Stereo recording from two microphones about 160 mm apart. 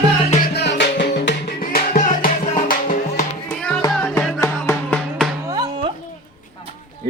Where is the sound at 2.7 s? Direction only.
50° left (ahead or behind).